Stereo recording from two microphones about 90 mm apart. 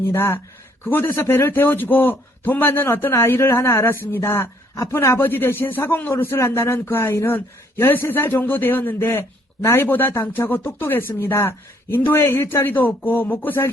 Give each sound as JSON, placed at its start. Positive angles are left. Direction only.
{"t": 0.1, "sound": "a man's voice", "side_deg": 25}